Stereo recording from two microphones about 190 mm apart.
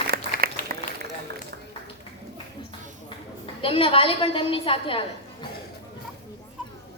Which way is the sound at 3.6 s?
30° left (ahead or behind).